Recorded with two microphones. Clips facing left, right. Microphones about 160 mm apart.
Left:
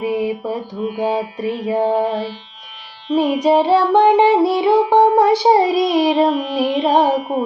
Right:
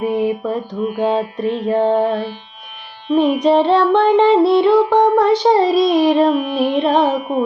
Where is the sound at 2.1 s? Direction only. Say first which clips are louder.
Right 1 dB; 55° right (ahead or behind).